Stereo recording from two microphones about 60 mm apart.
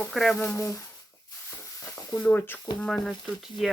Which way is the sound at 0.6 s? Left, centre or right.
Left.